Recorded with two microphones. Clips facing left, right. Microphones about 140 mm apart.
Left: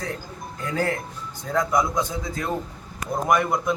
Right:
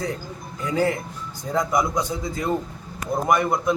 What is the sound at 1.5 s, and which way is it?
Speech, 15° right (ahead or behind).